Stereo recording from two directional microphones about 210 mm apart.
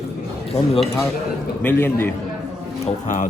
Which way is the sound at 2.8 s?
35° left (ahead or behind).